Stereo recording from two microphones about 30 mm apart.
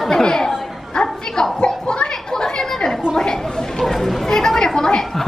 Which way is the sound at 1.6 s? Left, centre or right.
Left.